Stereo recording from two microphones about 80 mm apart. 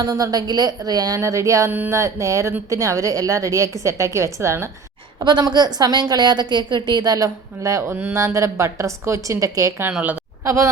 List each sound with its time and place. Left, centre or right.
0.1 s a woman's voice: right
1.2 s a woman's voice: right
5.2 s a woman's voice: right
7.6 s a woman's voice: right
8.1 s a woman's voice: right